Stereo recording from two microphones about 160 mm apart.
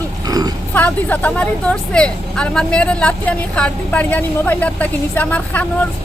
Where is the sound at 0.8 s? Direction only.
10° left (ahead or behind).